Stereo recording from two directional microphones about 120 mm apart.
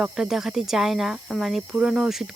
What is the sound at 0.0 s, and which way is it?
Speech, 5° right (ahead or behind).